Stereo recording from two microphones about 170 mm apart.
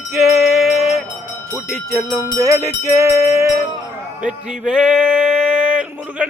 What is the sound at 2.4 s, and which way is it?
Music, 20° right (ahead or behind).